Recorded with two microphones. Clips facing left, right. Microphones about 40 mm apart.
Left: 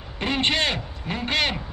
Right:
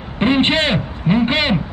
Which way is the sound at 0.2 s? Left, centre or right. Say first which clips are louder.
Right 8 dB; right.